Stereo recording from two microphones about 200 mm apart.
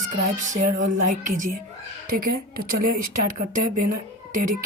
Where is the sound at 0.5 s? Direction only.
40° right (ahead or behind).